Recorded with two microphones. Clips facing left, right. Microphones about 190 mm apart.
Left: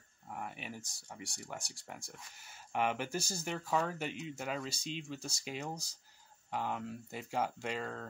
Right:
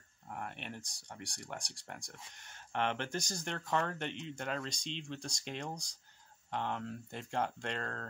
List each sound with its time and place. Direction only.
0.3 s speech: 5° left (ahead or behind)